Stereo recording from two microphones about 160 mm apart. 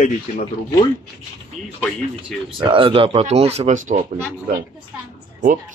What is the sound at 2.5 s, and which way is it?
Speech, 30° right (ahead or behind).